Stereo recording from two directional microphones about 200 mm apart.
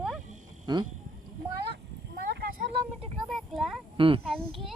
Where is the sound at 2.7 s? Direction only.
25° right (ahead or behind).